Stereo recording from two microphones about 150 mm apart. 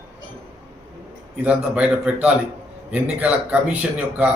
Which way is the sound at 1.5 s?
10° right (ahead or behind).